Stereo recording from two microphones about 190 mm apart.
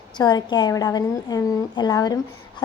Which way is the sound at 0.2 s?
20° left (ahead or behind).